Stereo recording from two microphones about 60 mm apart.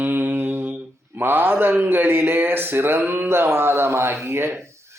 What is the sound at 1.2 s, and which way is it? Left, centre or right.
Speech, right.